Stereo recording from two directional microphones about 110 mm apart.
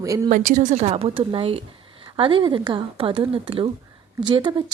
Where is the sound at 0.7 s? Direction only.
75° right (ahead or behind); by 4.6 s 50° right (ahead or behind).